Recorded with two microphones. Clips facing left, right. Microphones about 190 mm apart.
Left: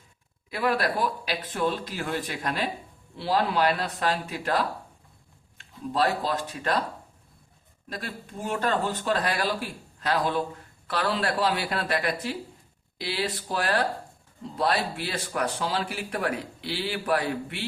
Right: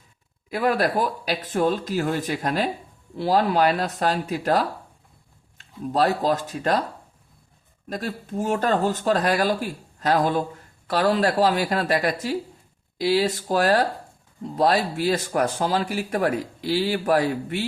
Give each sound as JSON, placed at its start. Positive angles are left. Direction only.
{"t": 0.5, "sound": "speech", "side_deg": -45}
{"t": 5.9, "sound": "speech", "side_deg": -45}
{"t": 7.9, "sound": "speech", "side_deg": -45}